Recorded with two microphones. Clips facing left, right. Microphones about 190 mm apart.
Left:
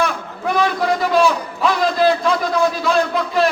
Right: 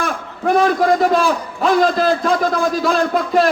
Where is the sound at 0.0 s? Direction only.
50° right (ahead or behind).